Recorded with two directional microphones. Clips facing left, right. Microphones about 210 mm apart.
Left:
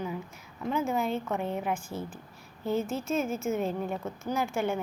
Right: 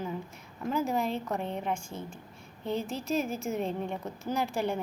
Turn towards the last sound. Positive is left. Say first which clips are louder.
# left 1 dB
turn(degrees=0)  # may be behind; listen again after turning